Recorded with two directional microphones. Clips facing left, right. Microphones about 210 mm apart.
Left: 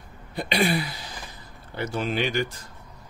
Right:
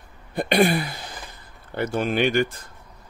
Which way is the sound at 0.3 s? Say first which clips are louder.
Right 5 dB; 55° right (ahead or behind).